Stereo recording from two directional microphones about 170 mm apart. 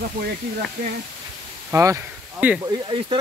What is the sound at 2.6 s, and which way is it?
Speech, 30° right (ahead or behind).